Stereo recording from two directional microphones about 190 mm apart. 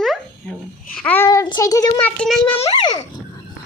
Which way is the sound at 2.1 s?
5° left (ahead or behind).